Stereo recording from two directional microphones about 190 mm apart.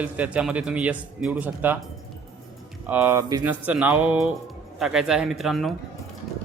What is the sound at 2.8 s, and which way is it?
A man's voice, 10° right (ahead or behind).